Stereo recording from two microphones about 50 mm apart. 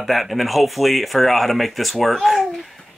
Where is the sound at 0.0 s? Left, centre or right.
Centre.